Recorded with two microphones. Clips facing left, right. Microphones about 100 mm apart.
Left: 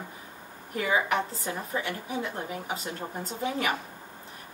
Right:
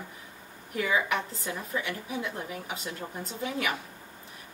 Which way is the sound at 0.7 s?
30° left (ahead or behind).